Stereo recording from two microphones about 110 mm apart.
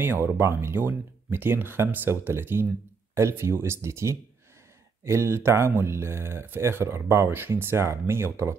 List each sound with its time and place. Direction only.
0.0 s speech: 20° right (ahead or behind)